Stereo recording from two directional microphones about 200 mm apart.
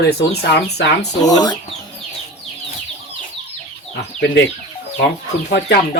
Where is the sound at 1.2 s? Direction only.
20° left (ahead or behind).